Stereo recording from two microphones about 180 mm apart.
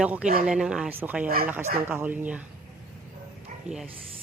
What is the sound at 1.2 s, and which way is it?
Speech, 55° right (ahead or behind).